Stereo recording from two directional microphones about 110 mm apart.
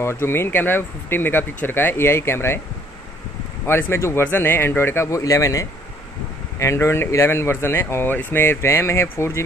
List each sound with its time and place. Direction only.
0.0 s speech: 25° left (ahead or behind)
3.6 s speech: 20° left (ahead or behind)